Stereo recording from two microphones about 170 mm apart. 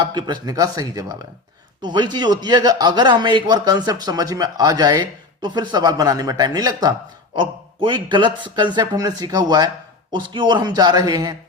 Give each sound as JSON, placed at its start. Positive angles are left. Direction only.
{"t": 0.0, "sound": "a man's voice", "side_deg": -25}